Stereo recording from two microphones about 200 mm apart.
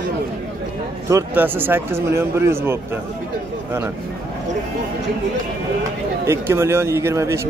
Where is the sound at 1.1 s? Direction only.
10° right (ahead or behind).